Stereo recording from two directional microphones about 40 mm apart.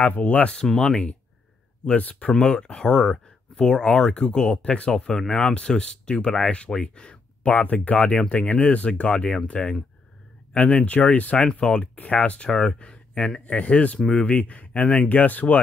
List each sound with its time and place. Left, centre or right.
0.0 s speech: left
0.7 s speech: centre
2.3 s speech: centre
4.3 s speech: left
4.9 s speech: centre
7.4 s speech: left
11.4 s speech: left
11.9 s speech: left
12.4 s speech: centre
12.7 s speech: left
13.9 s speech: centre
14.2 s speech: left